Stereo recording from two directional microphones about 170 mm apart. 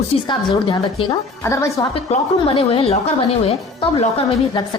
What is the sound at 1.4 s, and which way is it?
Speech, 15° left (ahead or behind).